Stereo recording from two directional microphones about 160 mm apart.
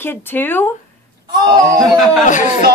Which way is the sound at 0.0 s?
15° left (ahead or behind).